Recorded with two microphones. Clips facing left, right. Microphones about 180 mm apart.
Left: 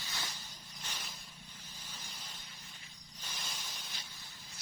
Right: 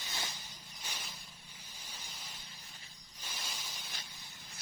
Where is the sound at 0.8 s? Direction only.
10° right (ahead or behind).